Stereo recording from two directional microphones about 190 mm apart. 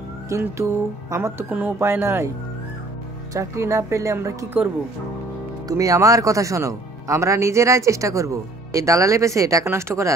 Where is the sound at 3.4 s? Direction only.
15° right (ahead or behind).